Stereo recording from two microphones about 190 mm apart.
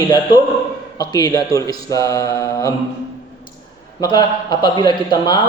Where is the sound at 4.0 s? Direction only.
20° left (ahead or behind).